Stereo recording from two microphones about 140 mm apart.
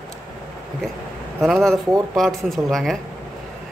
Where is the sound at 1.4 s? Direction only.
Centre (ahead or behind).